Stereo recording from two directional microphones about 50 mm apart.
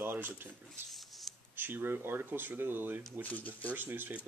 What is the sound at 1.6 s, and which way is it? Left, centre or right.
Speech, right.